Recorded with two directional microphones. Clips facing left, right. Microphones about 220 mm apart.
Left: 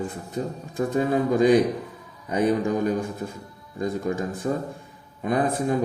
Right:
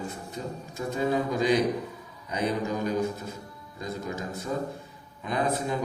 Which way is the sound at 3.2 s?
50° left (ahead or behind).